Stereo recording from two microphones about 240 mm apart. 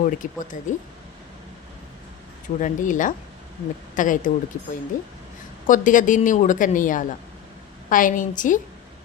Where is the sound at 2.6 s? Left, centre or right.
Left.